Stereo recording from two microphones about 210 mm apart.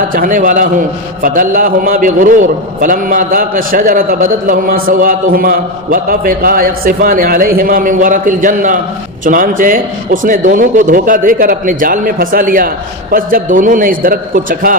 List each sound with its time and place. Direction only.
0.1 s a man's voice: 40° right (ahead or behind)